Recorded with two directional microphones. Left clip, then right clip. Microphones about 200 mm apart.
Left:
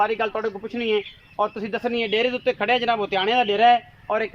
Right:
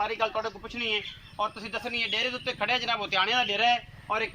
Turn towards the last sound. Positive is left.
turn(degrees=40)  # may be behind; listen again after turning